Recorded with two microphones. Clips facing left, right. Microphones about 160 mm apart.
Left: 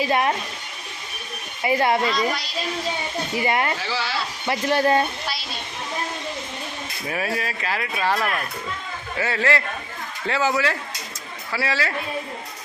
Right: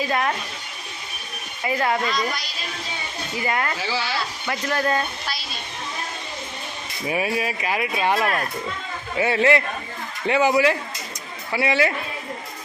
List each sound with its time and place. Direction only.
0.1 s speech: 25° left (ahead or behind)
1.6 s speech: 25° left (ahead or behind)
3.4 s speech: 25° left (ahead or behind)
3.8 s speech: centre (ahead or behind)
4.4 s speech: 25° left (ahead or behind)
7.1 s speech: 15° right (ahead or behind)